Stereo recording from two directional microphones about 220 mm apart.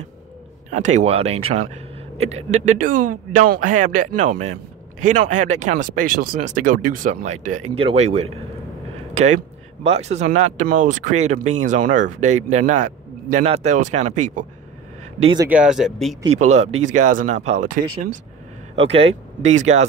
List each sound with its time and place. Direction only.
0.7 s speech: 35° right (ahead or behind)
9.8 s speech: 30° right (ahead or behind)
15.2 s speech: 20° right (ahead or behind)
15.5 s speech: 5° right (ahead or behind)
16.3 s speech: 30° right (ahead or behind)
18.8 s speech: 25° right (ahead or behind)